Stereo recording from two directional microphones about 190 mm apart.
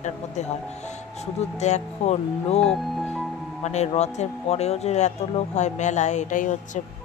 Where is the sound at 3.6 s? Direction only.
35° left (ahead or behind).